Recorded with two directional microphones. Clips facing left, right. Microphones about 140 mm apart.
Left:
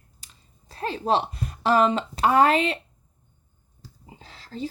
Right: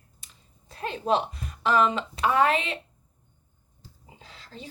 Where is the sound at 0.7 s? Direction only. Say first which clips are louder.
Left 2 dB; 35° left (ahead or behind).